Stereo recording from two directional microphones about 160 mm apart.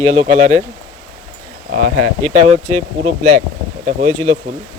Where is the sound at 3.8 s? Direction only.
50° right (ahead or behind).